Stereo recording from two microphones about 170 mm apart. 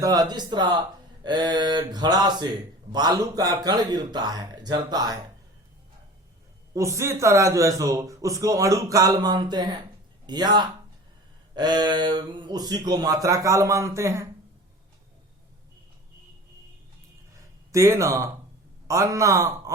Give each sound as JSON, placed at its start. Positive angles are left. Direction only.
{"t": 0.0, "sound": "speech", "side_deg": -20}
{"t": 6.7, "sound": "speech", "side_deg": -15}
{"t": 17.7, "sound": "a man's voice", "side_deg": -15}